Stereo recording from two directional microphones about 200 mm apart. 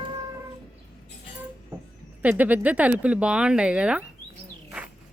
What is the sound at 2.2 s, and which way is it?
Speech, 10° right (ahead or behind).